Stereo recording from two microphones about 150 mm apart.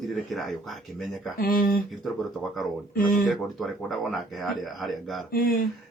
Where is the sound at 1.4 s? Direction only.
70° left (ahead or behind).